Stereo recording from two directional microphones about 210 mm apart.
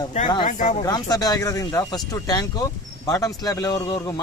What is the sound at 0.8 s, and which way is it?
Speech, 20° left (ahead or behind).